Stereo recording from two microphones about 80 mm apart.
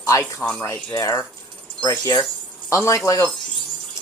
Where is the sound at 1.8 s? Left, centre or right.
Left.